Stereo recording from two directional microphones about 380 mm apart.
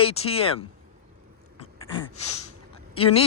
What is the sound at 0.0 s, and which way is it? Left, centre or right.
Speech, centre.